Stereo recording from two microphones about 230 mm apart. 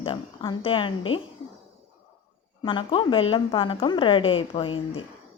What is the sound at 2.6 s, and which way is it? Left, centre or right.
Speech, left.